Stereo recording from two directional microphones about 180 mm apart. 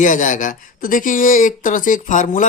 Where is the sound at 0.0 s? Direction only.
45° left (ahead or behind).